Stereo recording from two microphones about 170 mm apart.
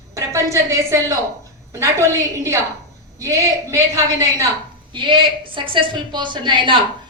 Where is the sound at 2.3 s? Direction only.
20° right (ahead or behind).